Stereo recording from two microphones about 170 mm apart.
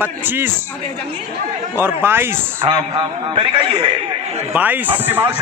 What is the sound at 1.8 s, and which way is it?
Speech, 15° right (ahead or behind).